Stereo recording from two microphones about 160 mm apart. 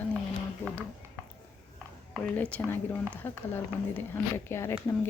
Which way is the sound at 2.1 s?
10° left (ahead or behind).